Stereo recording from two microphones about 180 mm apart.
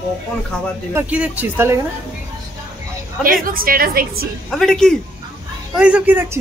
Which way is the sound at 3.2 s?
50° right (ahead or behind).